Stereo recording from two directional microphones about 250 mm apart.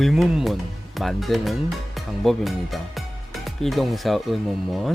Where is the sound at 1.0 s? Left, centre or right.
Centre.